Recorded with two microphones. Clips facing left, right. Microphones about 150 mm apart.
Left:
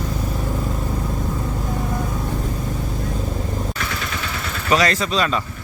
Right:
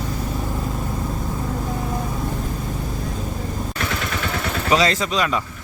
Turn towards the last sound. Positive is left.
turn(degrees=-15)  # may be behind; listen again after turning